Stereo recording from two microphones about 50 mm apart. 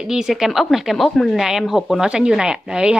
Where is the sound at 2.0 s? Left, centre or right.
Centre.